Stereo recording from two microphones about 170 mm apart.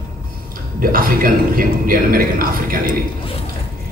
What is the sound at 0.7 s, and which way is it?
A man's voice, 55° right (ahead or behind).